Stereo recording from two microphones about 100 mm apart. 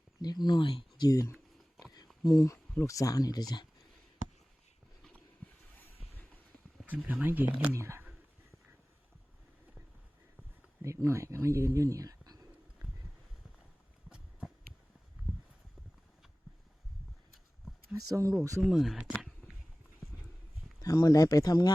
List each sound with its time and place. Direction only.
0.2 s speech: 45° left (ahead or behind)
1.8 s a sound: 45° left (ahead or behind)
2.2 s speech: 35° left (ahead or behind)
6.8 s speech: 15° right (ahead or behind)
10.8 s speech: 30° right (ahead or behind)
14.1 s a sound: 10° right (ahead or behind)
18.1 s speech: 30° right (ahead or behind)
18.6 s speech: 5° right (ahead or behind)
20.8 s speech: 40° left (ahead or behind)